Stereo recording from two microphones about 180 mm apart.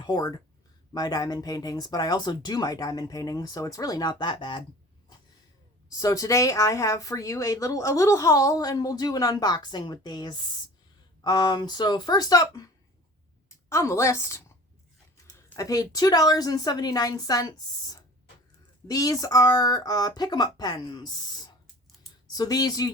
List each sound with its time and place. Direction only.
0.0 s speech: 20° left (ahead or behind)
6.0 s a woman's voice: 20° left (ahead or behind)